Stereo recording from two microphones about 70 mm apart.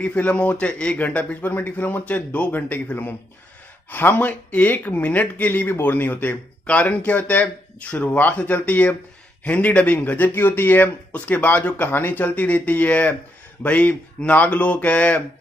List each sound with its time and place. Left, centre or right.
0.0 s speech: centre